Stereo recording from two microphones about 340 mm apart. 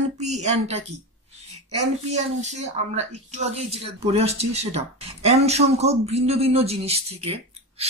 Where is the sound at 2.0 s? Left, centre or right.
Centre.